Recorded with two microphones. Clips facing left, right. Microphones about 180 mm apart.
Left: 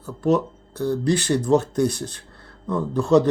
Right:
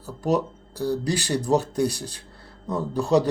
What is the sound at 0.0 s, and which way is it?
Speech, 35° right (ahead or behind).